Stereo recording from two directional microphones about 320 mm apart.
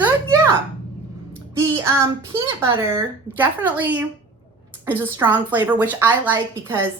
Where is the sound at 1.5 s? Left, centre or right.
Centre.